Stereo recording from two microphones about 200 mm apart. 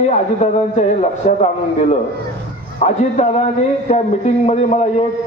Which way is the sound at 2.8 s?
35° left (ahead or behind).